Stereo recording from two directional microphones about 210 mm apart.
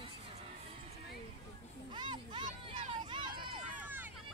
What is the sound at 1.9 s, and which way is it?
Music, 20° right (ahead or behind).